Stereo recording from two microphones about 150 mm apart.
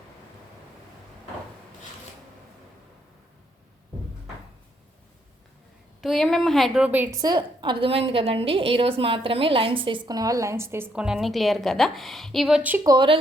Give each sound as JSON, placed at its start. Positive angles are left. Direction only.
{"t": 6.0, "sound": "a woman's voice", "side_deg": 0}
{"t": 7.2, "sound": "a woman's voice", "side_deg": -30}
{"t": 12.8, "sound": "speech", "side_deg": -30}